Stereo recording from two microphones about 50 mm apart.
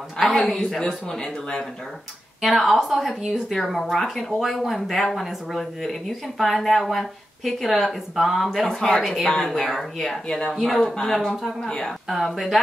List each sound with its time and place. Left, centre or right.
0.2 s a man's voice: centre
2.4 s speech: centre
8.6 s speech: centre
10.2 s speech: centre
10.5 s speech: centre